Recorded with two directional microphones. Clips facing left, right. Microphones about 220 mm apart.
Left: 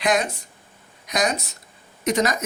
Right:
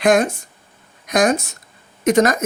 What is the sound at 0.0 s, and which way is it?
Speech, 50° right (ahead or behind).